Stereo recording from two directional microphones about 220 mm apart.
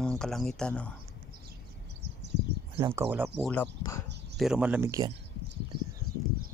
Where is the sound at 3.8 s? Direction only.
15° left (ahead or behind).